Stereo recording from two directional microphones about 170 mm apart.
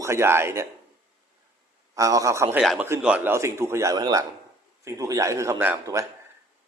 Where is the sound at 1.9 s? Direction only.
20° right (ahead or behind).